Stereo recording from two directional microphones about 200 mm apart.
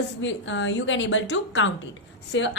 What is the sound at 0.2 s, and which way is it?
A woman's voice, 65° left (ahead or behind).